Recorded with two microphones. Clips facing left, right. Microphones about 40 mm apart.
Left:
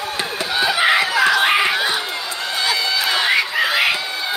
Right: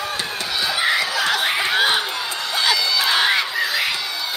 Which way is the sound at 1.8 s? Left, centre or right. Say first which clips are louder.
Right 2 dB; right.